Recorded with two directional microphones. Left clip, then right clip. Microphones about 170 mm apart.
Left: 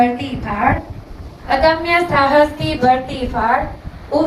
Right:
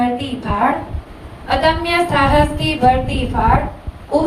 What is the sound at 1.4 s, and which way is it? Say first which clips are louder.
Speech: left 2 dB; 55° right (ahead or behind).